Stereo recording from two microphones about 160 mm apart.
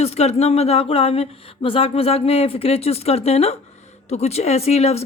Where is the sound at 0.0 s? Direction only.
40° left (ahead or behind).